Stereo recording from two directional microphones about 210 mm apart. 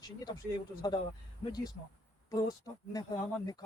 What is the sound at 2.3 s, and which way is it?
Speech, 15° left (ahead or behind).